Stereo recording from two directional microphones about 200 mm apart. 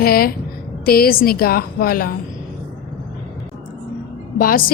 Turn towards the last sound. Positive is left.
turn(degrees=45)  # may be behind; listen again after turning